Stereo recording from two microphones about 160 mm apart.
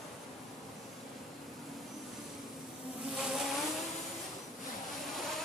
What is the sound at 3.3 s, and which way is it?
Vehicle, centre (ahead or behind).